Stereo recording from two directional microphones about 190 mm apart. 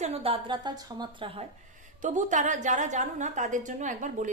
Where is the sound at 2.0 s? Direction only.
40° right (ahead or behind).